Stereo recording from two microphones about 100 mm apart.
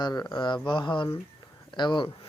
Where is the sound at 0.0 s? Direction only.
45° left (ahead or behind).